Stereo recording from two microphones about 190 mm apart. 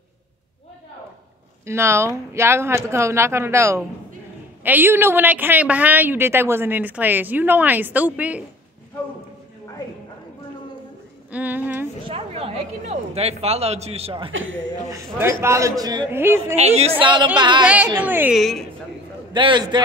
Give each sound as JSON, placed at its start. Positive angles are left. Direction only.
{"t": 1.7, "sound": "a woman's voice", "side_deg": -15}
{"t": 11.3, "sound": "speech", "side_deg": -10}
{"t": 12.0, "sound": "speech", "side_deg": -30}
{"t": 14.9, "sound": "a woman's voice", "side_deg": -15}
{"t": 16.5, "sound": "speech", "side_deg": -35}
{"t": 17.0, "sound": "a man's voice", "side_deg": -25}
{"t": 18.0, "sound": "a woman's voice", "side_deg": -10}
{"t": 19.3, "sound": "a man's voice", "side_deg": -25}